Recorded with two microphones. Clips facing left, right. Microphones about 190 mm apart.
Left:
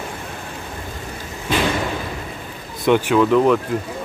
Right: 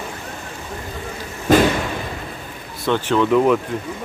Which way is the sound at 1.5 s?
45° right (ahead or behind).